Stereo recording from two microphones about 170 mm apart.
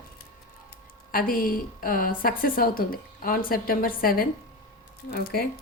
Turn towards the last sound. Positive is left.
turn(degrees=65)  # may be behind; listen again after turning